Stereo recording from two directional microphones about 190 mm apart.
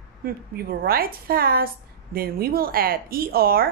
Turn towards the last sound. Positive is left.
turn(degrees=-50)  # may be behind; listen again after turning